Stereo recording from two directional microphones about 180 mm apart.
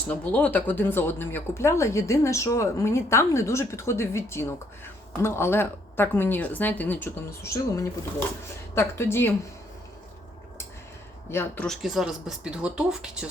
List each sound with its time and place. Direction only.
0.1 s speech: 10° left (ahead or behind)
11.3 s speech: 10° left (ahead or behind); by 13.3 s 5° right (ahead or behind)